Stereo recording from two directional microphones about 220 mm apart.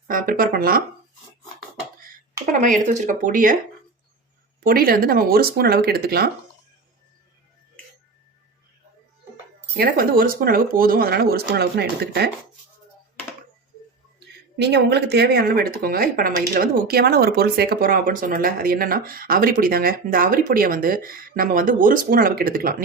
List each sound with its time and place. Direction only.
0.1 s speech: 40° right (ahead or behind)
2.5 s speech: 35° right (ahead or behind)
4.6 s speech: 40° right (ahead or behind)
9.7 s speech: 45° right (ahead or behind)
14.5 s speech: 50° right (ahead or behind)